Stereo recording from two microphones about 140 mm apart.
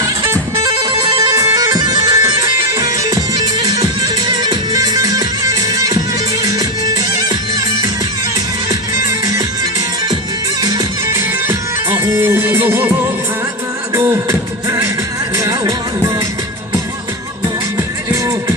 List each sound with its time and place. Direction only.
0.0 s music: 25° right (ahead or behind)
1.5 s bagpipes: 25° right (ahead or behind)
6.4 s music: 25° right (ahead or behind)
10.6 s music: 25° right (ahead or behind)
13.9 s beatboxing: 20° right (ahead or behind)
15.4 s music: 25° right (ahead or behind)